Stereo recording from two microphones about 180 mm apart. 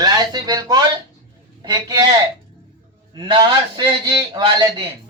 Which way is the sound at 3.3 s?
25° right (ahead or behind).